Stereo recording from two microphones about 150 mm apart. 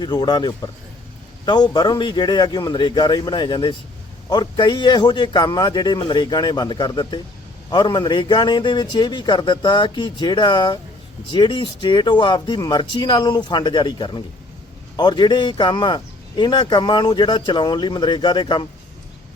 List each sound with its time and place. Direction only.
0.0 s a man's voice: 30° left (ahead or behind)